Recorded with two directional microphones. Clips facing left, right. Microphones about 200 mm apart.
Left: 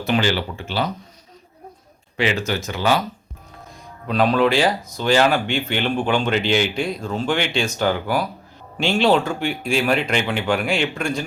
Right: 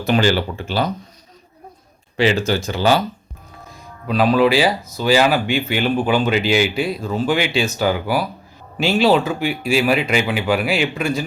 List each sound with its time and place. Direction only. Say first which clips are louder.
0.0 s speech: right 3 dB; 40° right (ahead or behind)
2.1 s speech: right 5 dB; 30° right (ahead or behind)
3.7 s speech: right 3 dB; 5° right (ahead or behind)